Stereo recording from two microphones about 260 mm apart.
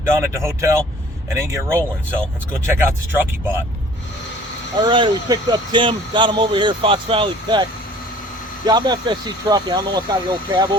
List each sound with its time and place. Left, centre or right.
0.0 s speech: centre
4.8 s speech: centre